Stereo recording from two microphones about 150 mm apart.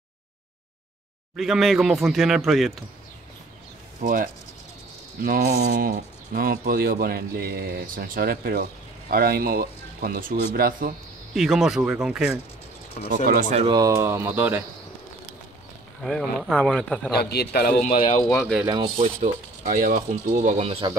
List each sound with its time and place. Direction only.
1.3 s speech: centre (ahead or behind)
4.0 s speech: 65° right (ahead or behind); by 10.9 s 80° right
11.3 s speech: 5° right (ahead or behind)
13.1 s speech: 70° right (ahead or behind)
13.7 s speech: 25° right (ahead or behind)
16.0 s speech: centre (ahead or behind)
17.1 s a man's voice: 90° left
18.4 s speech: centre (ahead or behind)
18.9 s speech: 65° right (ahead or behind); by 20.8 s 45° right (ahead or behind)